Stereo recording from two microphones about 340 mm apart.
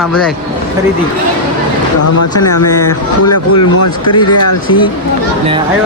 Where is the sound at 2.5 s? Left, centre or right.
Left.